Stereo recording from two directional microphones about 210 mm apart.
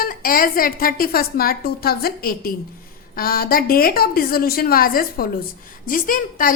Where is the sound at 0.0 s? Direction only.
45° left (ahead or behind).